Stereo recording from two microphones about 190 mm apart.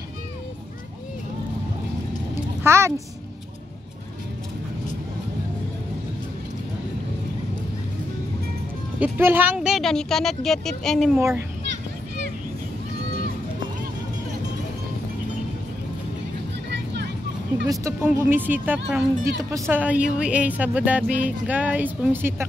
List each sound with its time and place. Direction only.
2.6 s music: 15° right (ahead or behind)
9.0 s speech: 10° right (ahead or behind)
11.1 s speech: 15° right (ahead or behind)
16.7 s vehicle: 65° right (ahead or behind)
17.6 s speech: 15° right (ahead or behind)